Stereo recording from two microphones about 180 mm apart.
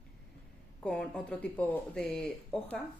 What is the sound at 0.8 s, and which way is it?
Speech, 5° left (ahead or behind).